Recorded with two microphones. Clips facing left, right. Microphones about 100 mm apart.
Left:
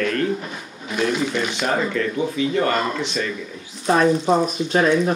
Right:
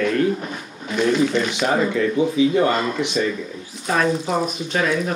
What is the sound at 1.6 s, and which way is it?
Speech, 10° right (ahead or behind).